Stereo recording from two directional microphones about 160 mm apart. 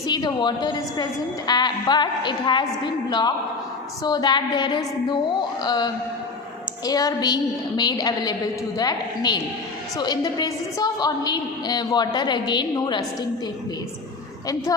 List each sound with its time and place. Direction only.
0.1 s a woman's voice: 25° left (ahead or behind)
14.4 s a woman's voice: 20° left (ahead or behind)